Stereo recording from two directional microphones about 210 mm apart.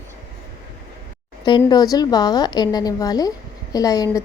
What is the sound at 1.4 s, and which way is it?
A woman's voice, 20° left (ahead or behind).